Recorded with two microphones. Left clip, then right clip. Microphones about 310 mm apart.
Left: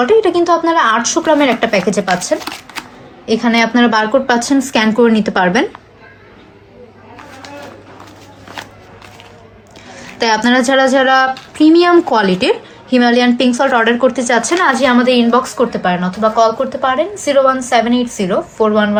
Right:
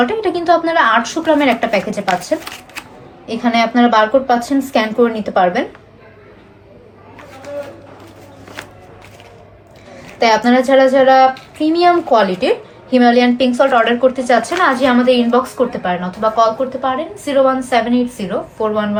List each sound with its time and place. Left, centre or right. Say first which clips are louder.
0.0 s a woman's voice: left 5 dB; left
10.2 s a woman's voice: right 1 dB; left